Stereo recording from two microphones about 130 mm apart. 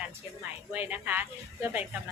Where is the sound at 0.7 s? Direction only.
15° right (ahead or behind).